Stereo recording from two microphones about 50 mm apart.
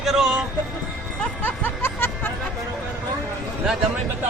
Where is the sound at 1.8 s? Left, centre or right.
Left.